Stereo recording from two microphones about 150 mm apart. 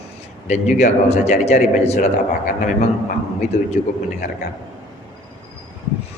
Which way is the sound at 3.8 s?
55° left (ahead or behind).